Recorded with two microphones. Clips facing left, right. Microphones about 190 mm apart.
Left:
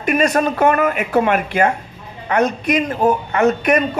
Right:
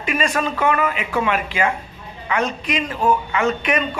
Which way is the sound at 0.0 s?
40° left (ahead or behind).